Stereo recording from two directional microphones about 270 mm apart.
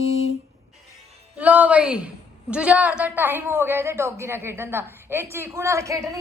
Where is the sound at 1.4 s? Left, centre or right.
Centre.